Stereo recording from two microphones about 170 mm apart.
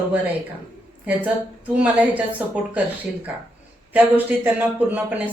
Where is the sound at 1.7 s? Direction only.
10° right (ahead or behind).